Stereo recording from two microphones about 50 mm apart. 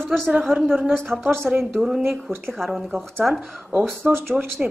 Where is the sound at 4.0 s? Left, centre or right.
Right.